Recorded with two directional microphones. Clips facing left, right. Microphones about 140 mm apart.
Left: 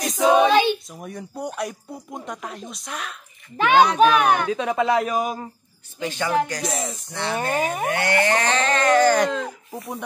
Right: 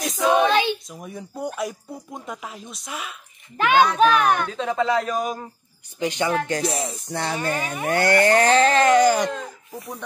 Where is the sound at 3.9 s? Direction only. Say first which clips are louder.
Left 1 dB; 15° left (ahead or behind).